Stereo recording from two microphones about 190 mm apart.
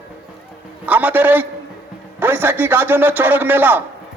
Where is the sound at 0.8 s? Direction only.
10° right (ahead or behind).